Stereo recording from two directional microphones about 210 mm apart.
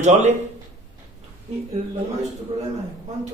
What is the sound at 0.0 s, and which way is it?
Speech, 35° right (ahead or behind).